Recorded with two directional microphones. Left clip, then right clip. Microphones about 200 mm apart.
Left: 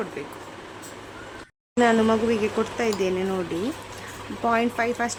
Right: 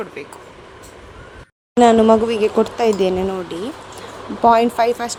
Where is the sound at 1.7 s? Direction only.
25° right (ahead or behind).